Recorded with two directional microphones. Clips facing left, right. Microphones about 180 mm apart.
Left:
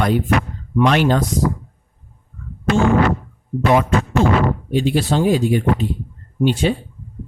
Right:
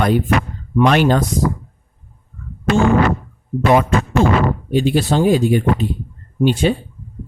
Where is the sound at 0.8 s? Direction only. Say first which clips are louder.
Right 2 dB; 50° right (ahead or behind).